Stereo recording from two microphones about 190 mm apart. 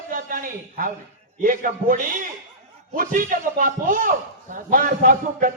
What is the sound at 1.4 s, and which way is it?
Speech, 45° right (ahead or behind).